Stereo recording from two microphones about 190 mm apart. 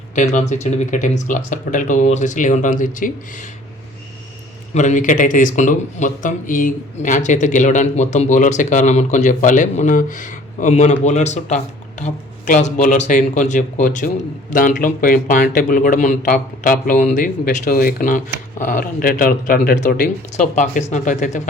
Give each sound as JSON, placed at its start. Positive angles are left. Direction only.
{"t": 0.2, "sound": "a man's voice", "side_deg": 40}
{"t": 4.7, "sound": "a man's voice", "side_deg": 40}